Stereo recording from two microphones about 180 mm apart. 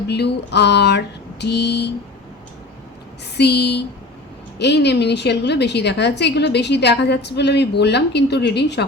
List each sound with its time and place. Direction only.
0.1 s a woman's voice: 70° left (ahead or behind)
3.3 s a woman's voice: 65° left (ahead or behind)